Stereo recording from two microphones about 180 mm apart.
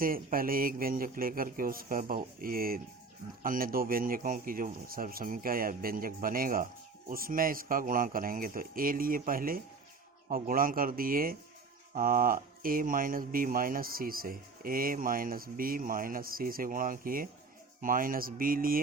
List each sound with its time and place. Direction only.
0.0 s speech: 50° right (ahead or behind)